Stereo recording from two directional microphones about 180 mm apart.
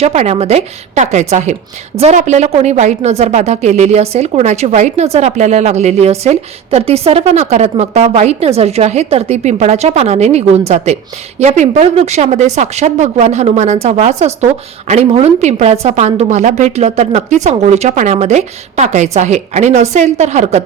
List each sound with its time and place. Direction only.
0.0 s a woman's voice: 35° right (ahead or behind)